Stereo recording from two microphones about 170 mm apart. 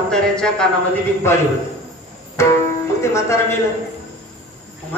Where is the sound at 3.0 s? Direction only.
15° left (ahead or behind).